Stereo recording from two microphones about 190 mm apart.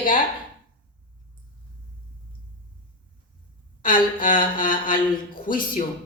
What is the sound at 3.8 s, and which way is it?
Speech, 45° left (ahead or behind).